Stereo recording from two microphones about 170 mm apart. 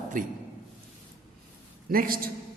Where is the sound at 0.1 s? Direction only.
50° right (ahead or behind).